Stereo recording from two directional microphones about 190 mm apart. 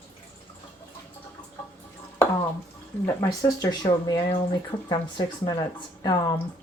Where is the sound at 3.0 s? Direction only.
15° left (ahead or behind).